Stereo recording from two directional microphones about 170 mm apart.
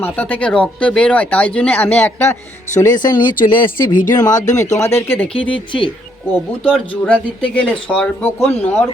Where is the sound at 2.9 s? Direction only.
25° left (ahead or behind).